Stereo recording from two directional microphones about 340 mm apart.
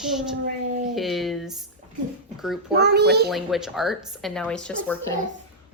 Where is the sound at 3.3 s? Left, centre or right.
Centre.